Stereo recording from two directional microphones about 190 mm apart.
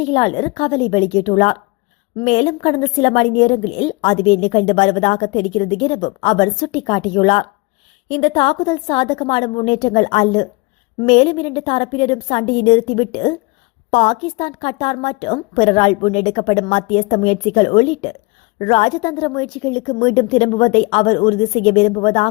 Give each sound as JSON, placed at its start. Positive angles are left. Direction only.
{"t": 0.0, "sound": "a woman's voice", "side_deg": 30}